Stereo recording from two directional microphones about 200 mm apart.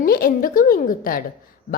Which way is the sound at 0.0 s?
50° left (ahead or behind).